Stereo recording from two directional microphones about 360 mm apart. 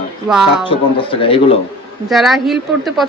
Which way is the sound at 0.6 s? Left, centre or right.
Centre.